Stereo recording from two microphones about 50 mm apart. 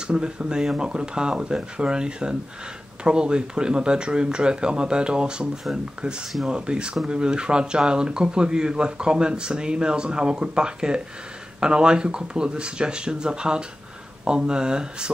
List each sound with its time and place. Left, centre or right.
0.0 s speech: centre
6.5 s speech: centre